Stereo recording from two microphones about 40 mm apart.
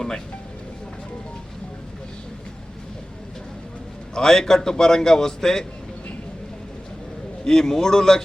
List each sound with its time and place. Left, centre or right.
4.1 s a man's voice: centre
7.4 s a man's voice: centre